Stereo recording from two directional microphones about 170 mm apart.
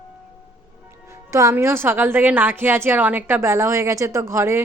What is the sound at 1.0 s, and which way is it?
Speech, 15° right (ahead or behind).